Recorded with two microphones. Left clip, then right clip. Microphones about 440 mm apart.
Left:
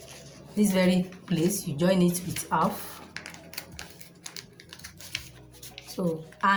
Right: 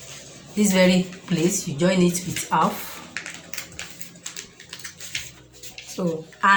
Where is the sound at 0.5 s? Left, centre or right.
Left.